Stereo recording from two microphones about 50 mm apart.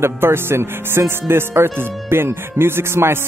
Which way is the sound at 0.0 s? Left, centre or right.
Right.